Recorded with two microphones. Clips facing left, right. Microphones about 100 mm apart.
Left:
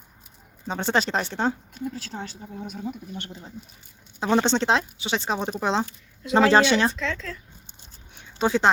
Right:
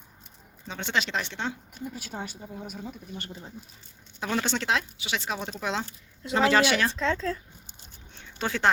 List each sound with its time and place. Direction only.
0.7 s speech: 40° left (ahead or behind)
1.8 s speech: 10° right (ahead or behind)
4.2 s speech: 25° left (ahead or behind)
6.9 s speech: 35° right (ahead or behind)
8.1 s a sound: 15° left (ahead or behind)